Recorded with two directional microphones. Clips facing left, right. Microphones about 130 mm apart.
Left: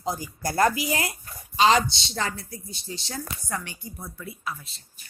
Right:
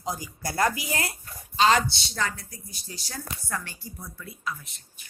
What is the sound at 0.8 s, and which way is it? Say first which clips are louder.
A woman's voice: left 4 dB; 20° left (ahead or behind).